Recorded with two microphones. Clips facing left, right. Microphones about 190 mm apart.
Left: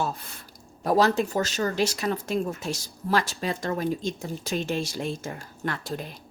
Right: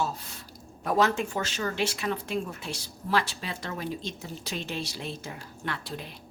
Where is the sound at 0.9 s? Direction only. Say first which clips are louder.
Left 4 dB; 35° left (ahead or behind).